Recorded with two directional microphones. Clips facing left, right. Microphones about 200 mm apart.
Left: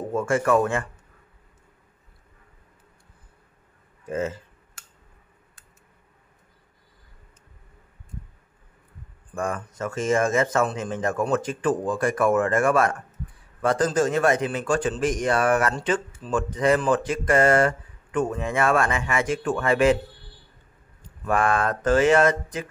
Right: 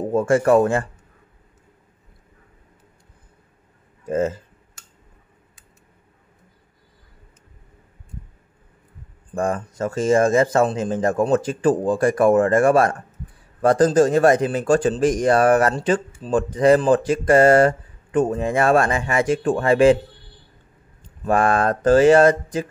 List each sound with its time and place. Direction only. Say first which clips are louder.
0.1 s speech: right 6 dB; 35° right (ahead or behind)
4.1 s speech: right 6 dB; 40° right (ahead or behind)
9.3 s speech: right 6 dB; 30° right (ahead or behind)
21.2 s speech: right 4 dB; 35° right (ahead or behind)